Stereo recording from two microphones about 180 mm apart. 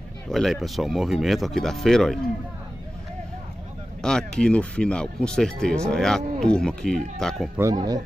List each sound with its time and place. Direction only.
0.3 s speech: centre (ahead or behind)
4.0 s speech: 5° left (ahead or behind)
7.5 s speech: 20° right (ahead or behind)